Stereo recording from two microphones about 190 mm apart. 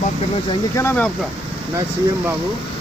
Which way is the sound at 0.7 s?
10° left (ahead or behind).